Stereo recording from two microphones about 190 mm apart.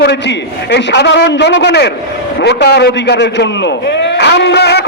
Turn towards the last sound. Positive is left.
turn(degrees=60)  # may be behind; listen again after turning